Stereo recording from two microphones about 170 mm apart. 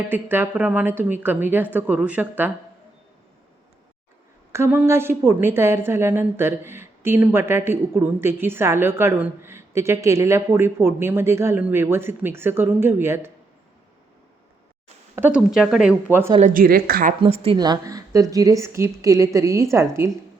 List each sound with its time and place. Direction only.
0.1 s a woman's voice: 10° right (ahead or behind)
4.5 s a woman's voice: 15° right (ahead or behind)
15.1 s speech: 10° right (ahead or behind)
16.4 s speech: 55° right (ahead or behind)
17.2 s a woman's voice: 35° right (ahead or behind); by 19.9 s 15° right (ahead or behind)